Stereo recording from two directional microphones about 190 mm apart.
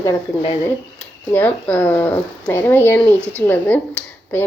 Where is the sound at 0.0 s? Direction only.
20° left (ahead or behind).